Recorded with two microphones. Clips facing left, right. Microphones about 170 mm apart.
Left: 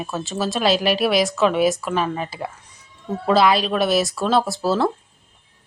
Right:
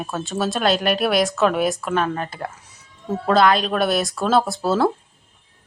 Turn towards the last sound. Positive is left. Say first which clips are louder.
# right 1 dB
turn(degrees=0)  # may be behind; listen again after turning